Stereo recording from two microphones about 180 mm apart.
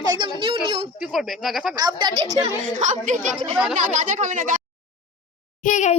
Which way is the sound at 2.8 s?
45° right (ahead or behind).